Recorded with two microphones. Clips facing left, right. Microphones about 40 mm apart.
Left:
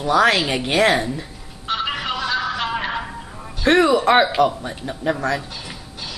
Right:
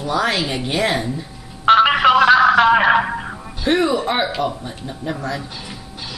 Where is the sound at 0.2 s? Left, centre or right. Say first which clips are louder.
Left 3 dB; left.